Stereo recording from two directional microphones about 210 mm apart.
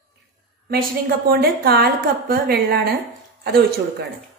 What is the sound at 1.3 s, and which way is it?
A woman's voice, 50° right (ahead or behind).